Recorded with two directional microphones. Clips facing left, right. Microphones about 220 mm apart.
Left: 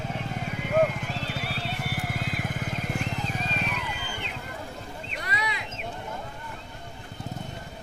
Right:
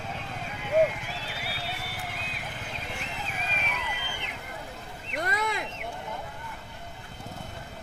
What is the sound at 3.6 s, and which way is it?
Vehicle, 15° right (ahead or behind).